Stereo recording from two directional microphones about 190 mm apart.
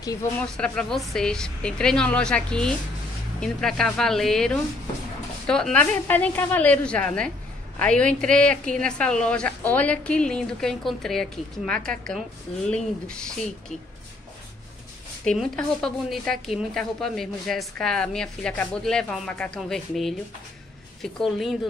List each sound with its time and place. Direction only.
0.0 s speech: 20° left (ahead or behind)
0.4 s a woman's voice: 5° left (ahead or behind)
15.2 s a woman's voice: 5° left (ahead or behind)